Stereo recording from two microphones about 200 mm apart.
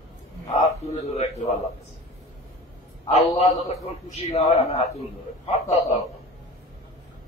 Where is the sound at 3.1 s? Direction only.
35° left (ahead or behind).